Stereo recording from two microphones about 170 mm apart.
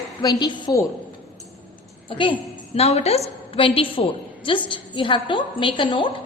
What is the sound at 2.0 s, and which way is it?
A woman's voice, 30° left (ahead or behind).